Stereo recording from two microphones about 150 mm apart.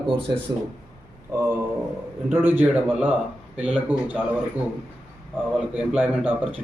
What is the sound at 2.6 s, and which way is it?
A man's voice, 10° right (ahead or behind).